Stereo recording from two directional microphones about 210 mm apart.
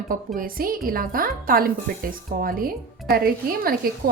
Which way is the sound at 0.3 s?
45° right (ahead or behind).